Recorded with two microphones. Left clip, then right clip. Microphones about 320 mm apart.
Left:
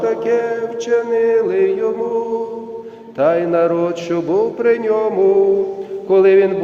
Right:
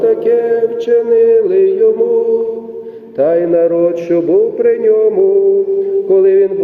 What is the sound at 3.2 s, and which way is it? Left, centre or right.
Chant, centre.